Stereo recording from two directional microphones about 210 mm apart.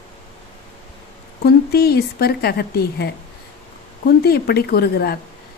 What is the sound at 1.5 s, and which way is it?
A woman's voice, 50° left (ahead or behind).